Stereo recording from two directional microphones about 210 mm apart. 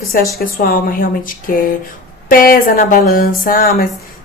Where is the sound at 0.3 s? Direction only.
45° left (ahead or behind).